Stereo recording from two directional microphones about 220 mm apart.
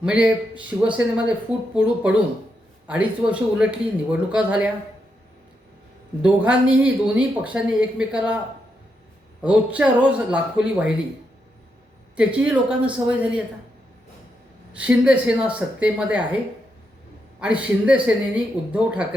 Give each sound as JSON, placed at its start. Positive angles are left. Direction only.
{"t": 0.0, "sound": "speech", "side_deg": -5}
{"t": 6.2, "sound": "speech", "side_deg": -5}
{"t": 9.4, "sound": "speech", "side_deg": -5}
{"t": 12.1, "sound": "speech", "side_deg": -5}
{"t": 14.8, "sound": "speech", "side_deg": -5}
{"t": 17.4, "sound": "speech", "side_deg": -5}